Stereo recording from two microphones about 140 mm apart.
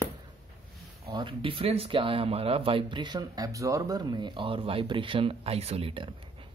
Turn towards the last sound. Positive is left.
turn(degrees=-40)  # may be behind; listen again after turning